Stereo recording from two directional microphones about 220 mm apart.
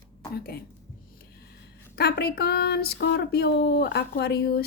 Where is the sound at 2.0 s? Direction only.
45° left (ahead or behind).